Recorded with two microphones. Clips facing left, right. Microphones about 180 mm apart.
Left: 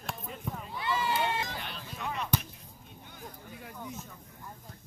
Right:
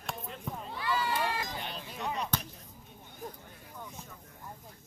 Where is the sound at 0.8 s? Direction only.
25° left (ahead or behind).